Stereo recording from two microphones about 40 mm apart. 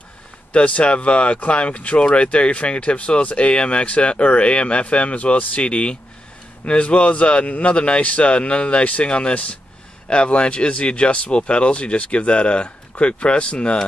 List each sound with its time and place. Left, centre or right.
0.5 s speech: left